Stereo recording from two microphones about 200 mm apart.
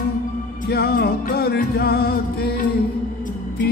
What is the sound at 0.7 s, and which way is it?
Music, 50° left (ahead or behind).